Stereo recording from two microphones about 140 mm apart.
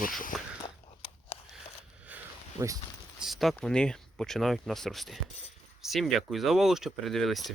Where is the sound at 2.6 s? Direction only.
30° right (ahead or behind).